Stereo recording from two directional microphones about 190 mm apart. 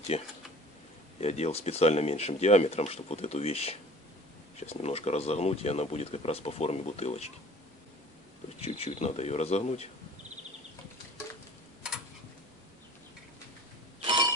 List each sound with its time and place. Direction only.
0.1 s speech: 35° left (ahead or behind)
8.6 s speech: 30° left (ahead or behind)